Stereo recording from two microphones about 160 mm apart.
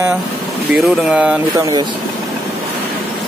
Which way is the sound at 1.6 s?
20° right (ahead or behind).